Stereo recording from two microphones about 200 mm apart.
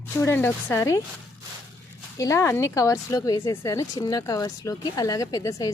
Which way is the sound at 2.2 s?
15° left (ahead or behind).